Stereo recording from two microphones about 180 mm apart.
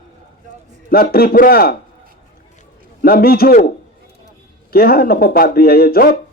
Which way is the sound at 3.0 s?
55° left (ahead or behind).